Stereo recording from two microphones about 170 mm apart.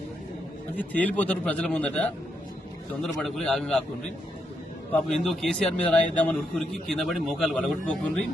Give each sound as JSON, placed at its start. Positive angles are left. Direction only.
{"t": 0.8, "sound": "a man's voice", "side_deg": 10}
{"t": 4.9, "sound": "a man's voice", "side_deg": 5}